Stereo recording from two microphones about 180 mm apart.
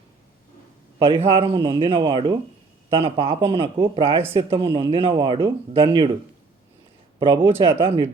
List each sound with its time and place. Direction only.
0.9 s a man's voice: 30° right (ahead or behind)
7.2 s speech: 25° right (ahead or behind)